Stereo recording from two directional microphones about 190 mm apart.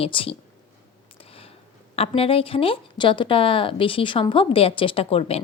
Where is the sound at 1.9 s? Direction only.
30° left (ahead or behind).